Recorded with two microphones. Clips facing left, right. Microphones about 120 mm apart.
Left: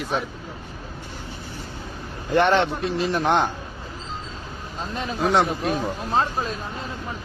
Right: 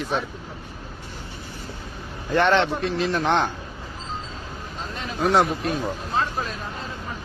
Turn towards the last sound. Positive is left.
turn(degrees=25)  # may be behind; listen again after turning